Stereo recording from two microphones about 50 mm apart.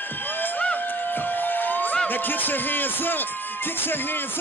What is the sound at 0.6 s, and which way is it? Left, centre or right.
Crowd, left.